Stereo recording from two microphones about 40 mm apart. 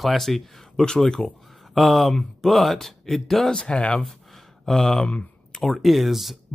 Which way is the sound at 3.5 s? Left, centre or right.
Left.